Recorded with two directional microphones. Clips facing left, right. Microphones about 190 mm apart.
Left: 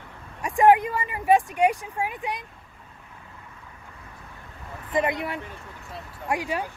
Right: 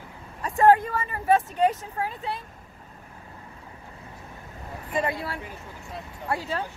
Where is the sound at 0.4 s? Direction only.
15° left (ahead or behind).